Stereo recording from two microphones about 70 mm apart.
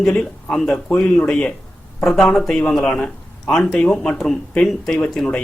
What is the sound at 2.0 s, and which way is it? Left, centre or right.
Speech, centre.